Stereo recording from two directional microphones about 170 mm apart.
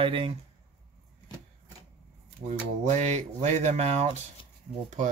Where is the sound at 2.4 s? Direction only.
40° right (ahead or behind).